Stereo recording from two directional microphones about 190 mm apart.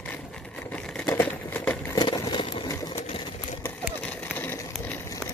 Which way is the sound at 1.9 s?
20° left (ahead or behind).